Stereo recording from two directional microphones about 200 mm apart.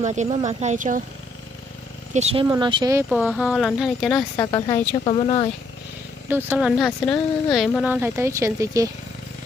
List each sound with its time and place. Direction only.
0.0 s a woman's voice: 35° right (ahead or behind)
2.1 s a woman's voice: 30° right (ahead or behind)
2.4 s speech: 20° right (ahead or behind)
3.1 s speech: centre (ahead or behind)
4.4 s speech: 20° left (ahead or behind)
5.0 s speech: 30° left (ahead or behind)
6.2 s speech: 10° right (ahead or behind)